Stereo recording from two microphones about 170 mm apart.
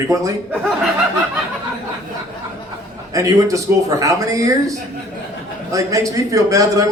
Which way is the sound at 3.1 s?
20° right (ahead or behind).